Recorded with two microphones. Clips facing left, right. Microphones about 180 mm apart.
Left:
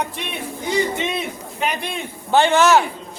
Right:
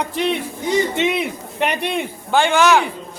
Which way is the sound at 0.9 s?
65° right (ahead or behind).